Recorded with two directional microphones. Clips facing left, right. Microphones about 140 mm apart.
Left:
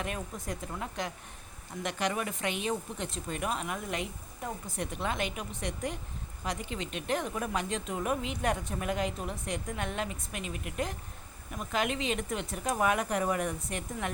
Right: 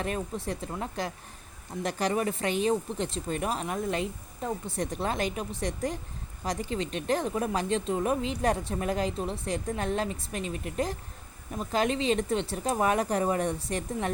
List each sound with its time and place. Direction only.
0.0 s a woman's voice: 35° right (ahead or behind)